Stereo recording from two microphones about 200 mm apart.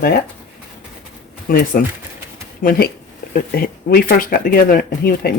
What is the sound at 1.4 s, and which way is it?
Speech, 45° left (ahead or behind).